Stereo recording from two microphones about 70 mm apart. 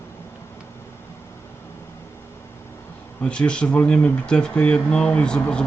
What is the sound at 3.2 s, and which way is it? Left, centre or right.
Speech, centre.